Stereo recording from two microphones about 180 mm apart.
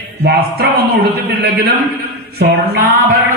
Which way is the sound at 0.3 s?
60° right (ahead or behind).